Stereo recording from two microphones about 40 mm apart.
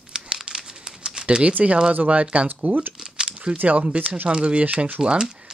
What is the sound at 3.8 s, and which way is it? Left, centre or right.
Speech, right.